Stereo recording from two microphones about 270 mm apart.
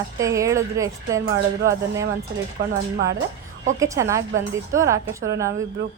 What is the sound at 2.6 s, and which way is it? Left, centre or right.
Speech, right.